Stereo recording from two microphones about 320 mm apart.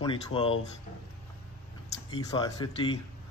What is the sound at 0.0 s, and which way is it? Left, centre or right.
Speech, centre.